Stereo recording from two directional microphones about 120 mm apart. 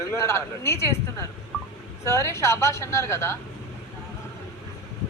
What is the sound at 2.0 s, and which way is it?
A woman's voice, 25° left (ahead or behind).